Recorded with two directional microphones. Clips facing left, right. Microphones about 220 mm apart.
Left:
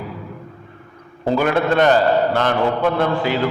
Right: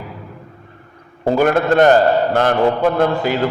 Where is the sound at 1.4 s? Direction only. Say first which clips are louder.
Right 4 dB; 45° right (ahead or behind).